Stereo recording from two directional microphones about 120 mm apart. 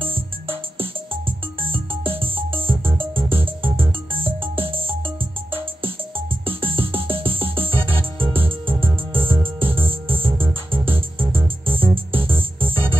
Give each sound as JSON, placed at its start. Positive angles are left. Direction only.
{"t": 0.0, "sound": "music", "side_deg": -50}